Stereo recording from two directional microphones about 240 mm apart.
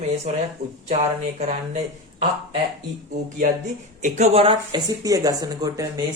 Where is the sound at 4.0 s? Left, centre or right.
Right.